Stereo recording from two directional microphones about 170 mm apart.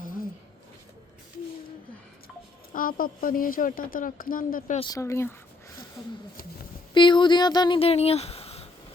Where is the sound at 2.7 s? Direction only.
55° left (ahead or behind).